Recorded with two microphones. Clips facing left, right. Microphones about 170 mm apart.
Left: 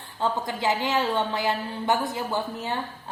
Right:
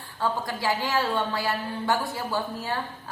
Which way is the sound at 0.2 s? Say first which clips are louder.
Left 1 dB; 20° left (ahead or behind).